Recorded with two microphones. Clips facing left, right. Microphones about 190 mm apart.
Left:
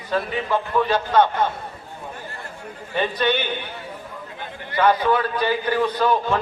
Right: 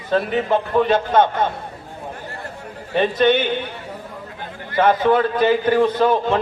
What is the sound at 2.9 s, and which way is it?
Speech, 20° right (ahead or behind).